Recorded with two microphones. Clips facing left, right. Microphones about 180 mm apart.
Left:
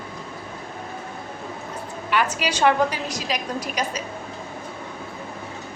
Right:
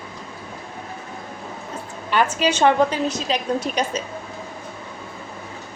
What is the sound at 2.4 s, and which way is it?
A woman's voice, 25° right (ahead or behind).